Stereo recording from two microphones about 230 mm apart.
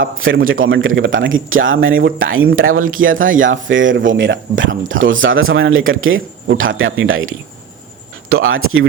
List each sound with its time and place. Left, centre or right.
0.0 s speech: right